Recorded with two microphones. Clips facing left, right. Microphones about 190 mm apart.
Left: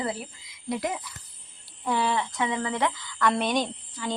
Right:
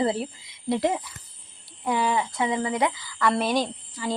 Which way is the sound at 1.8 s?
10° right (ahead or behind).